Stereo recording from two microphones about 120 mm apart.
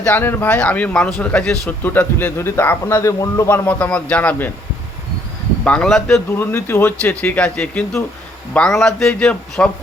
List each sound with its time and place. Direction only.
0.1 s speech: 15° left (ahead or behind)
3.7 s speech: 10° left (ahead or behind)
5.6 s speech: 10° left (ahead or behind)
6.3 s speech: 20° left (ahead or behind)